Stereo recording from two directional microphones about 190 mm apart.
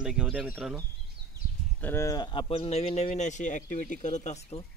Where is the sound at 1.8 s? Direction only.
15° left (ahead or behind); by 4.6 s 35° left (ahead or behind).